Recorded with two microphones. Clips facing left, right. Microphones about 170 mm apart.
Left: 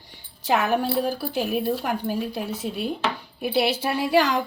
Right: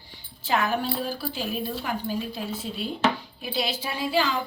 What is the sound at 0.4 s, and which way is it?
A woman's voice, 60° left (ahead or behind).